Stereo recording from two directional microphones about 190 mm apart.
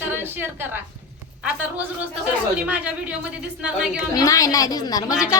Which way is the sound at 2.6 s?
5° right (ahead or behind).